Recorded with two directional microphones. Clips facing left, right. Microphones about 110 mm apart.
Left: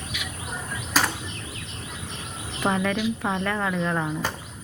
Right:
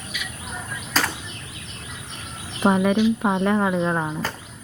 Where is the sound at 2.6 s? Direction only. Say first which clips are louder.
Right 6 dB; 20° right (ahead or behind).